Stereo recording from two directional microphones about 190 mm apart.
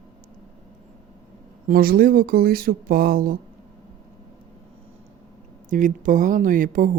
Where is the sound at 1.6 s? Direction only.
50° right (ahead or behind).